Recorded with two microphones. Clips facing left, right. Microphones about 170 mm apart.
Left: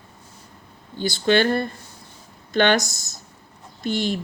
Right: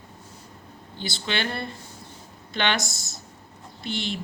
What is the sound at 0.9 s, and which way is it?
Speech, 50° left (ahead or behind).